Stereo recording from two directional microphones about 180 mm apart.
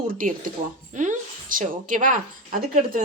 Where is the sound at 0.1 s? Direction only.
50° right (ahead or behind).